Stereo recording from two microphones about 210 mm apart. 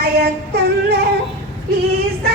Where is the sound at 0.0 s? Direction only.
50° right (ahead or behind).